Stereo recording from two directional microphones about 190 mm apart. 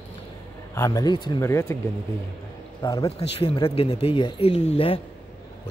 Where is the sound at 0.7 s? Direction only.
15° left (ahead or behind).